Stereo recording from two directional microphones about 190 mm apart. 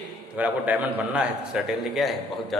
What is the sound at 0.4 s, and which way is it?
A man's voice, 10° right (ahead or behind).